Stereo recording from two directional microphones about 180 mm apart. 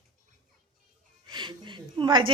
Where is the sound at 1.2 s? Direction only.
25° right (ahead or behind).